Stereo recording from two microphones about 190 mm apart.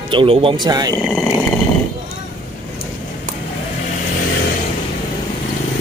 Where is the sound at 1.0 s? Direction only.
Centre (ahead or behind).